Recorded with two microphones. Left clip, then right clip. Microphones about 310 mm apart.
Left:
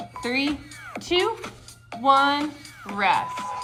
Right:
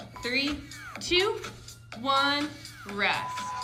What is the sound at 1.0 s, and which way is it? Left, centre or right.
Speech, centre.